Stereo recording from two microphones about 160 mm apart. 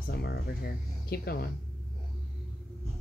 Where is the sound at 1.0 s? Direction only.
75° left (ahead or behind).